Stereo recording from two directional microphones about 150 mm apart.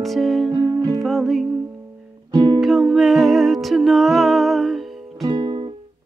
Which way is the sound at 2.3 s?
30° right (ahead or behind).